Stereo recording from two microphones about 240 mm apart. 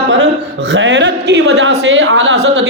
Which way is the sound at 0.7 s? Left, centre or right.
Right.